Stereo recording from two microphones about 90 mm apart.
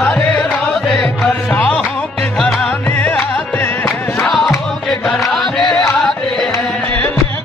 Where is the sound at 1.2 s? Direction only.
20° left (ahead or behind).